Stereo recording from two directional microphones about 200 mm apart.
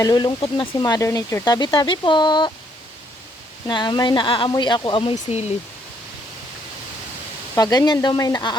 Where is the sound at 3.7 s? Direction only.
20° left (ahead or behind).